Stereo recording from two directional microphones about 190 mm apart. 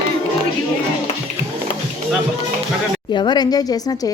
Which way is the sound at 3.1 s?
25° left (ahead or behind).